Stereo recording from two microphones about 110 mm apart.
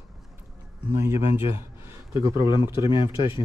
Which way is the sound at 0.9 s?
25° right (ahead or behind).